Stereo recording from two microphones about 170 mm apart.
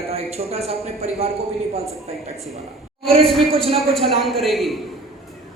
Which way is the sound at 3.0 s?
35° right (ahead or behind).